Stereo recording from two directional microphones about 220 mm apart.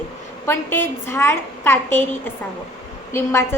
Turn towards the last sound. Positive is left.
turn(degrees=10)  # may be behind; listen again after turning